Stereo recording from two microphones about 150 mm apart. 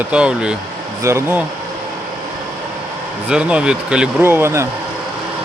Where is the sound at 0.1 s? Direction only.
5° right (ahead or behind).